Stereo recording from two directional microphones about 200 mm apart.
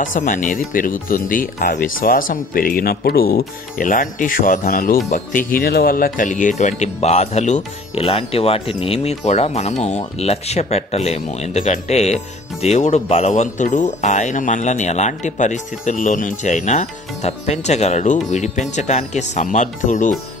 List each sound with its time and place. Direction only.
0.0 s speech: 40° left (ahead or behind)